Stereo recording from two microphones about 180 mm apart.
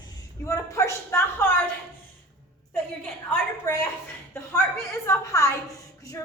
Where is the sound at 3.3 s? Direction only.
10° left (ahead or behind).